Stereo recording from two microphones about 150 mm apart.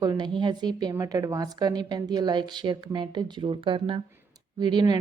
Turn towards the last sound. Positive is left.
turn(degrees=-30)  # may be behind; listen again after turning